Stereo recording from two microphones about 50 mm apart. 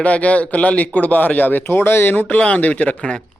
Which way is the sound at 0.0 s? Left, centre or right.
Left.